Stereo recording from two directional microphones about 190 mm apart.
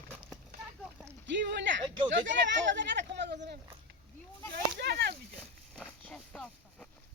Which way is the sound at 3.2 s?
60° right (ahead or behind).